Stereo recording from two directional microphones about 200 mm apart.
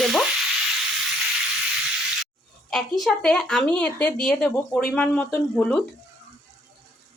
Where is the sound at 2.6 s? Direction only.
Centre (ahead or behind).